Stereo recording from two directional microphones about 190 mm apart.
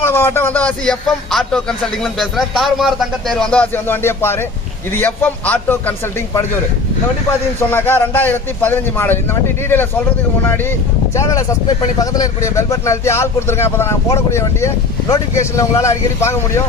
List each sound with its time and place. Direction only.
0.0 s speech: 10° left (ahead or behind)
7.7 s speech: 10° left (ahead or behind)
11.1 s speech: 15° left (ahead or behind)